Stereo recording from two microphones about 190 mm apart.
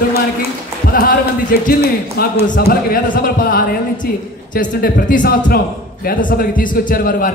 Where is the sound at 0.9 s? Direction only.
50° left (ahead or behind).